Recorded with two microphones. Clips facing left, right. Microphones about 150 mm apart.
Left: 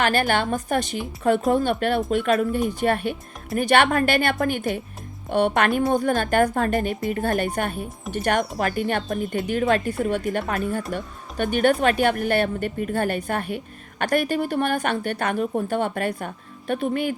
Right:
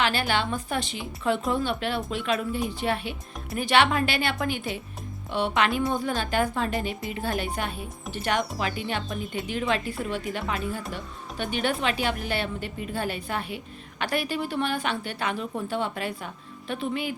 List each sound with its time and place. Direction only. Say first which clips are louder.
0.0 s a woman's voice: left 4 dB; 50° left (ahead or behind)